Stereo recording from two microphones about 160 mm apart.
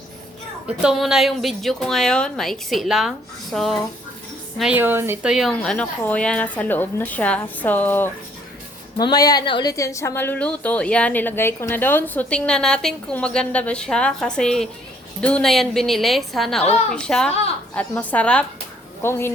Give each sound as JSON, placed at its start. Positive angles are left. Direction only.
{"t": 0.8, "sound": "a woman's voice", "side_deg": -5}
{"t": 9.0, "sound": "a woman's voice", "side_deg": 25}